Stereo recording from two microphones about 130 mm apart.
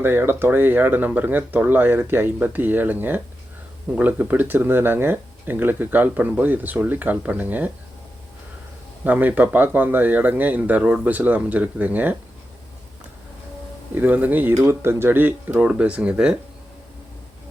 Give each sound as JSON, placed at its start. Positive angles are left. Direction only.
{"t": 0.0, "sound": "speech", "side_deg": -15}
{"t": 9.0, "sound": "speech", "side_deg": -15}
{"t": 13.9, "sound": "speech", "side_deg": -15}